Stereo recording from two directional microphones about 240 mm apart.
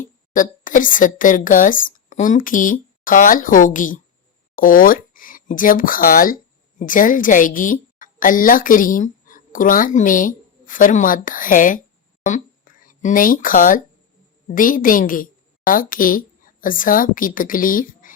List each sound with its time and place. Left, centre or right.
0.0 s a woman's voice: left